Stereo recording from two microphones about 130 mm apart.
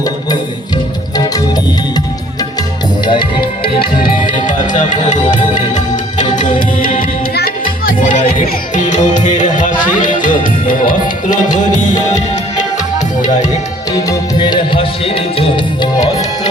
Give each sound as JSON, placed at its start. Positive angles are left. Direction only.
{"t": 3.1, "sound": "music", "side_deg": 40}
{"t": 4.0, "sound": "music", "side_deg": 90}
{"t": 7.6, "sound": "speech", "side_deg": 90}
{"t": 9.0, "sound": "music", "side_deg": 75}
{"t": 10.0, "sound": "music", "side_deg": 90}
{"t": 11.4, "sound": "music", "side_deg": 35}
{"t": 13.9, "sound": "music", "side_deg": 30}